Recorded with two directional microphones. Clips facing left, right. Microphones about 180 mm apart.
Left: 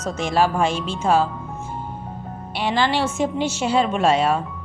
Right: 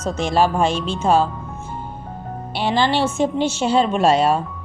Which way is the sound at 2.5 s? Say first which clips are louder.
Right 2 dB; 30° right (ahead or behind).